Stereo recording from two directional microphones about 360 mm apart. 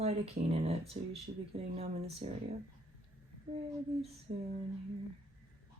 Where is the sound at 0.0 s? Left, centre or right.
Centre.